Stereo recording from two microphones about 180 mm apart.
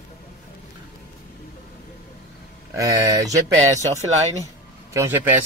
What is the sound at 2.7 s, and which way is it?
Speech, 15° right (ahead or behind).